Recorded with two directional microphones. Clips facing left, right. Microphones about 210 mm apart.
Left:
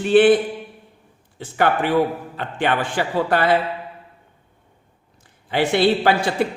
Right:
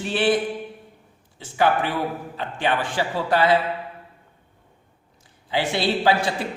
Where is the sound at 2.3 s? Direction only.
55° left (ahead or behind).